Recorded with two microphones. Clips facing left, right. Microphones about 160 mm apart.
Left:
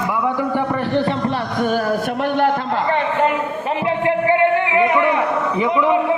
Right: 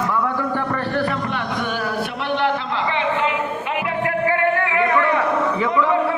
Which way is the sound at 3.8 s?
20° left (ahead or behind).